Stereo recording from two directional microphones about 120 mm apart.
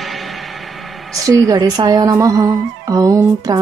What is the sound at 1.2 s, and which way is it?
A woman's voice, 30° right (ahead or behind).